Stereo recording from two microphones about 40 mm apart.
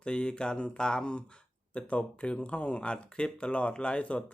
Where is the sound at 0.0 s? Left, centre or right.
Left.